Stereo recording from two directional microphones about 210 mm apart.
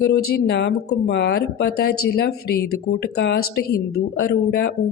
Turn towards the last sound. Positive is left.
turn(degrees=45)  # may be behind; listen again after turning